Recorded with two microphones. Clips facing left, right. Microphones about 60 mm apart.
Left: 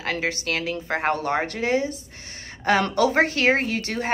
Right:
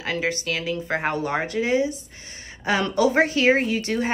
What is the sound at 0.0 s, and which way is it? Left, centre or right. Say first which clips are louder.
Speech: right 1 dB; left.